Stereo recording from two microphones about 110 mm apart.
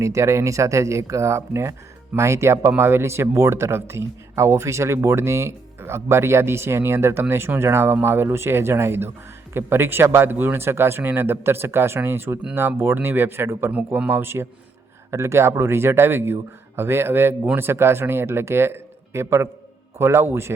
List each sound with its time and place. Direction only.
0.0 s speech: 25° right (ahead or behind)